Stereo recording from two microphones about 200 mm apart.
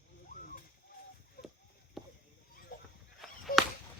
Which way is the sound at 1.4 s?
50° left (ahead or behind).